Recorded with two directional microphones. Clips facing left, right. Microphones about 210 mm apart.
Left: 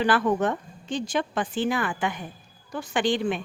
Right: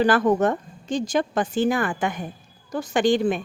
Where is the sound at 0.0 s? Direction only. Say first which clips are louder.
Right 4 dB; 40° right (ahead or behind).